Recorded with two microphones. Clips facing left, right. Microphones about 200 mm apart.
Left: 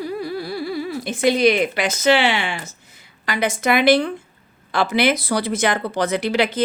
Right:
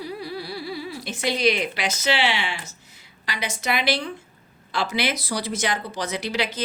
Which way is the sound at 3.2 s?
50° left (ahead or behind).